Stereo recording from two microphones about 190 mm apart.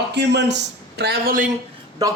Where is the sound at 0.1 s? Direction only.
65° right (ahead or behind).